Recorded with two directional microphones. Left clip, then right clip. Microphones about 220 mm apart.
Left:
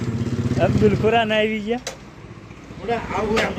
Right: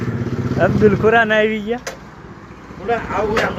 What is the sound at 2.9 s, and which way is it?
Speech, 30° left (ahead or behind).